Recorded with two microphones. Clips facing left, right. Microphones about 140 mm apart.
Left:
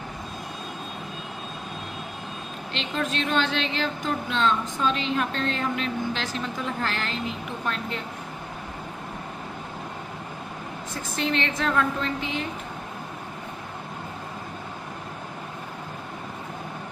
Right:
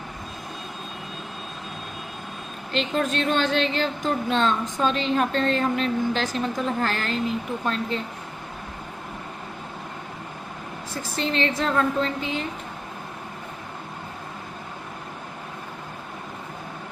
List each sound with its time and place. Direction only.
2.7 s a woman's voice: 40° right (ahead or behind)
10.9 s a woman's voice: 30° right (ahead or behind)